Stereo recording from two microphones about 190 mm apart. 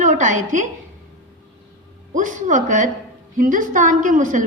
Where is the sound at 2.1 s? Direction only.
40° right (ahead or behind).